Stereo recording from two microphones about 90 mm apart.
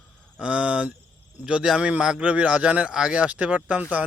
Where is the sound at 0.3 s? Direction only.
10° right (ahead or behind).